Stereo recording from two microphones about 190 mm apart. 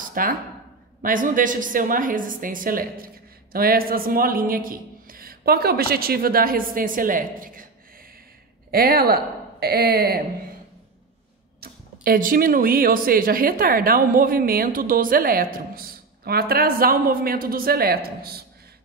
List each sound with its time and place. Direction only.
0.0 s a sound: 45° right (ahead or behind)
1.0 s speech: 45° right (ahead or behind)
8.7 s speech: 55° right (ahead or behind)
11.6 s speech: 50° right (ahead or behind)